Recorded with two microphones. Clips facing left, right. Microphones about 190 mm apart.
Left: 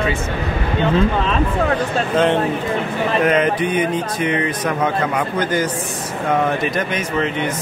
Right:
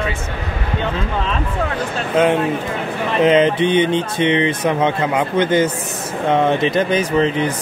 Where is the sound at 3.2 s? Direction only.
25° right (ahead or behind).